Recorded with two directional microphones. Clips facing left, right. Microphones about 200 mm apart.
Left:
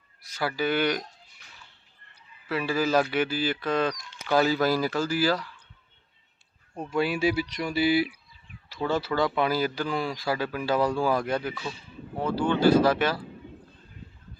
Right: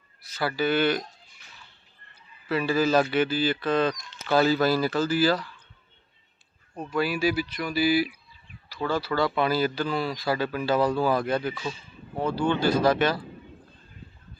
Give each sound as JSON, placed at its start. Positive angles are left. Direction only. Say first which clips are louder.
{"t": 0.2, "sound": "speech", "louder": "right 1 dB", "side_deg": 15}
{"t": 2.5, "sound": "speech", "louder": "right 2 dB", "side_deg": 10}
{"t": 6.9, "sound": "speech", "louder": "even", "side_deg": 25}